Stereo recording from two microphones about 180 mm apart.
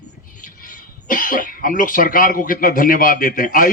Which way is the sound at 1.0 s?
50° left (ahead or behind).